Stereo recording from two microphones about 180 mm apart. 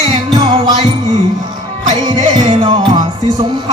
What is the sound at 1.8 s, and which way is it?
Music, 35° right (ahead or behind).